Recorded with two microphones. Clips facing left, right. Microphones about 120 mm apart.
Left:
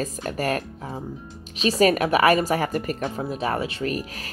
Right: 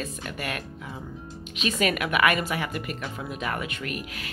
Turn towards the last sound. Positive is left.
turn(degrees=35)  # may be behind; listen again after turning